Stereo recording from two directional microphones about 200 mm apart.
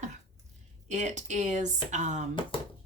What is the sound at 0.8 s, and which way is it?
A woman's voice, 35° right (ahead or behind).